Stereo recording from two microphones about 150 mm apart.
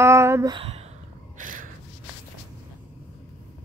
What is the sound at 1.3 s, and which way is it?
Gasp, 65° right (ahead or behind).